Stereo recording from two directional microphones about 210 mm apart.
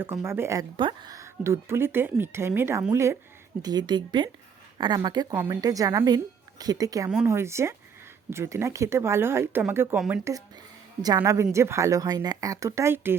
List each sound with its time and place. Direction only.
0.0 s speech: 10° right (ahead or behind)